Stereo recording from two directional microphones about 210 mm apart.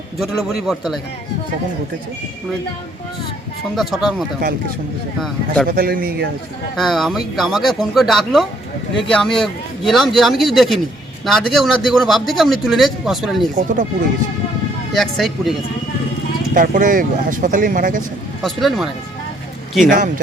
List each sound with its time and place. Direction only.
0.2 s speech: centre (ahead or behind)
3.8 s speech: centre (ahead or behind)
5.6 s a man's voice: 45° right (ahead or behind)
6.7 s speech: centre (ahead or behind)
13.6 s speech: 35° right (ahead or behind)
14.9 s speech: centre (ahead or behind)
16.6 s speech: 40° right (ahead or behind)
18.4 s speech: centre (ahead or behind)
19.8 s speech: 40° right (ahead or behind)